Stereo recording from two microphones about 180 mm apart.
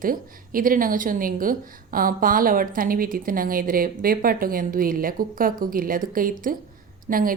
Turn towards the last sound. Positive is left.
turn(degrees=-50)  # may be behind; listen again after turning